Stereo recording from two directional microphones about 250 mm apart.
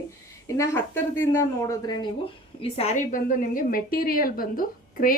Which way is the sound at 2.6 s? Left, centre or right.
Left.